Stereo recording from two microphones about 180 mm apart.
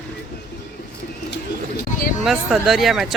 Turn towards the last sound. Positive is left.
turn(degrees=0)  # may be behind; listen again after turning